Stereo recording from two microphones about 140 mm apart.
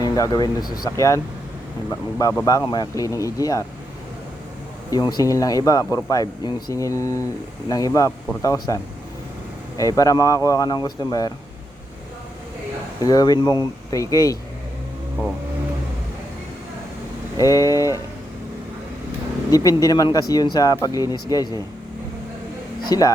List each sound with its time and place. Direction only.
0.0 s speech: 25° left (ahead or behind)
4.9 s speech: 30° left (ahead or behind)
13.0 s speech: 25° left (ahead or behind)
17.4 s speech: 25° left (ahead or behind)
19.5 s speech: 25° left (ahead or behind)
22.9 s speech: 25° left (ahead or behind)